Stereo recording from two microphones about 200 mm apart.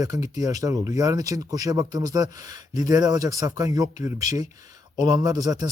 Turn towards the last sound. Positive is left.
turn(degrees=-20)  # may be behind; listen again after turning